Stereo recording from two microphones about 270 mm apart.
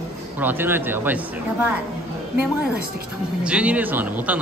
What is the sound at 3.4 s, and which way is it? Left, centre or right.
Speech, centre.